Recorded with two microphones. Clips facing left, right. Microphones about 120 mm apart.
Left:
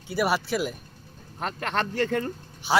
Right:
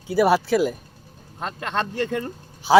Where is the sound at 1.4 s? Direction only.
20° right (ahead or behind).